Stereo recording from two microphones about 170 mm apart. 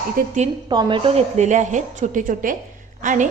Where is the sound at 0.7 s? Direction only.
30° right (ahead or behind); by 3.2 s 50° right (ahead or behind).